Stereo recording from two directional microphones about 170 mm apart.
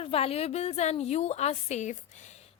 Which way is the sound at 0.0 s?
35° left (ahead or behind).